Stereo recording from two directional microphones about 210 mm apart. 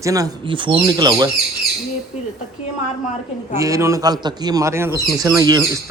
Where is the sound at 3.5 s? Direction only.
15° right (ahead or behind).